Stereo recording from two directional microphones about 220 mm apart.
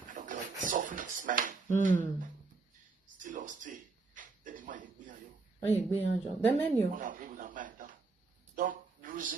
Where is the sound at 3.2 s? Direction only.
35° right (ahead or behind).